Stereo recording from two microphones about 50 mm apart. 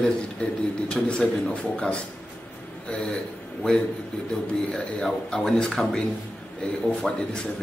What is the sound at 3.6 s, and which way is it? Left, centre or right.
A man's voice, centre.